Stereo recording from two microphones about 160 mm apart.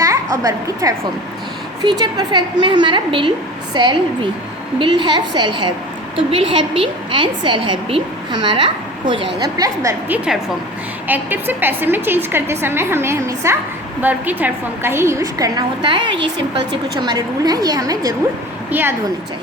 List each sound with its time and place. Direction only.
0.0 s a woman's voice: 20° right (ahead or behind)
11.1 s a woman's voice: 10° right (ahead or behind)